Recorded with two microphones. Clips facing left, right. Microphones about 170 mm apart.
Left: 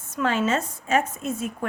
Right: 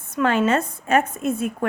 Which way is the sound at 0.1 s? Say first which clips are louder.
Right 4 dB; 60° right (ahead or behind).